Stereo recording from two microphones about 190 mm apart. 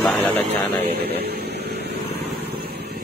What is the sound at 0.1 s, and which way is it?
Speech, 10° left (ahead or behind).